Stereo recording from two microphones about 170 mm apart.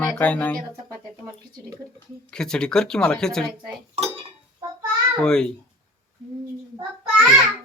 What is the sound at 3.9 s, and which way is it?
Dishes, 35° right (ahead or behind).